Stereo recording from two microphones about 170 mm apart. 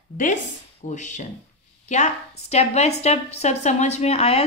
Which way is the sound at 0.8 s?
45° left (ahead or behind).